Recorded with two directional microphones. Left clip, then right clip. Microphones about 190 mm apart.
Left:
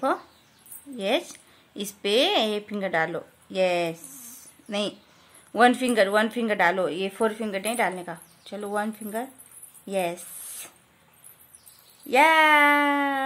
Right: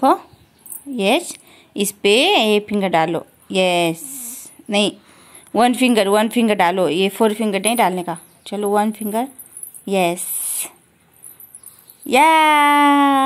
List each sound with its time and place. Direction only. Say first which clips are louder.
0.9 s a woman's voice: right 8 dB; 15° right (ahead or behind)
12.1 s a woman's voice: right 5 dB; 15° right (ahead or behind)